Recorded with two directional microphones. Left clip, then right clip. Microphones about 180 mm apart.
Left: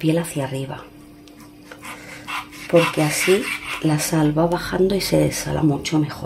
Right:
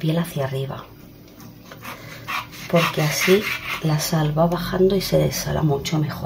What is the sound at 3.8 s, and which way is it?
Speech, 50° left (ahead or behind).